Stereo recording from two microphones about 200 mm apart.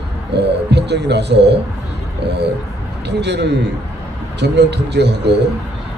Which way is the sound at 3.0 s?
60° right (ahead or behind).